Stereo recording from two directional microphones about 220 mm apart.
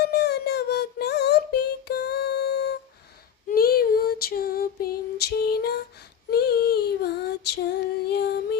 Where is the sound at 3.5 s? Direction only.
45° left (ahead or behind).